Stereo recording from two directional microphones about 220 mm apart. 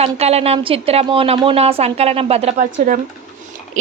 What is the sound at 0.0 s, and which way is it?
A woman's voice, 30° right (ahead or behind).